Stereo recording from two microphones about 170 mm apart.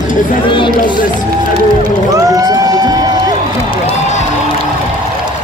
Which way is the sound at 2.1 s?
20° right (ahead or behind).